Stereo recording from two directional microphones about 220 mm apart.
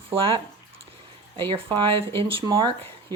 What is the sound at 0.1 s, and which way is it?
Speech, 25° right (ahead or behind).